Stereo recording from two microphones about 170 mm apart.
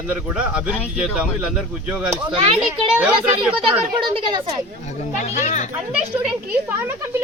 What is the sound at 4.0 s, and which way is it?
Speech, 30° right (ahead or behind).